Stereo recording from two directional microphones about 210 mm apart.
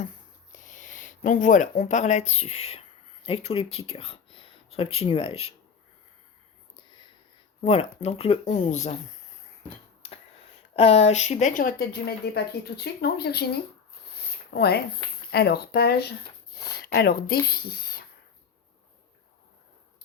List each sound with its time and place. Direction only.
0.5 s speech: 35° left (ahead or behind)
7.6 s speech: 30° left (ahead or behind)
10.0 s a sound: 30° left (ahead or behind)
10.8 s speech: 30° left (ahead or behind); by 18.0 s 45° left (ahead or behind)